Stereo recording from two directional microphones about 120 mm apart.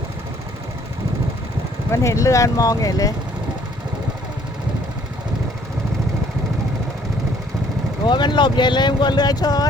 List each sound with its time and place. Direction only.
1.9 s speech: 25° left (ahead or behind)
8.0 s speech: 40° left (ahead or behind)